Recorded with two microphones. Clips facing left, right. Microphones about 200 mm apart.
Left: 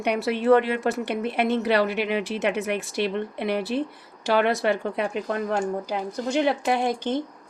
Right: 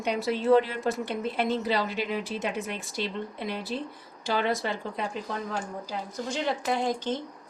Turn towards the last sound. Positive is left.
turn(degrees=65)  # may be behind; listen again after turning